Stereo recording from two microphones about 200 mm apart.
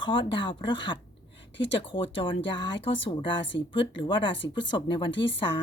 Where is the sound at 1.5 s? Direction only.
65° left (ahead or behind).